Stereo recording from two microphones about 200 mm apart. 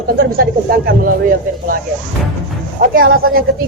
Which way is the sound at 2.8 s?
45° right (ahead or behind).